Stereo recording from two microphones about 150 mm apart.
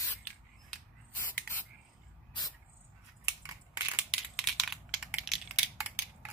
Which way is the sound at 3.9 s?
5° right (ahead or behind).